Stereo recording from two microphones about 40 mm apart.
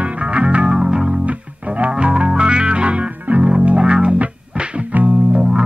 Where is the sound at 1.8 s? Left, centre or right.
Right.